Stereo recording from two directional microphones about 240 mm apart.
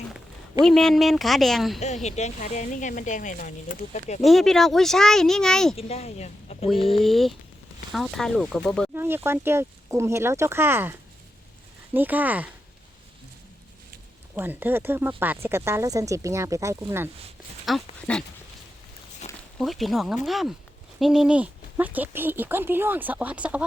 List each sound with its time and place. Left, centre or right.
0.6 s speech: centre
2.0 s speech: left
4.2 s speech: centre
5.7 s speech: left
6.7 s speech: centre
9.0 s speech: centre
11.9 s speech: centre
14.3 s speech: centre
17.7 s speech: centre
19.5 s speech: centre